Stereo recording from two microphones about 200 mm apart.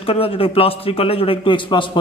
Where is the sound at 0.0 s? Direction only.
25° left (ahead or behind).